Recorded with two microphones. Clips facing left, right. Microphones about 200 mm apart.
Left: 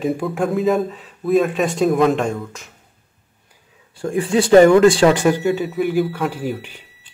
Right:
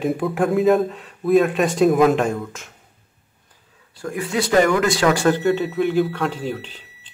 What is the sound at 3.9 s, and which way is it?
Speech, 30° left (ahead or behind).